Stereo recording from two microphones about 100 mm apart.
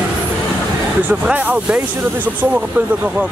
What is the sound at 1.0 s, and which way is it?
Speech, 15° right (ahead or behind).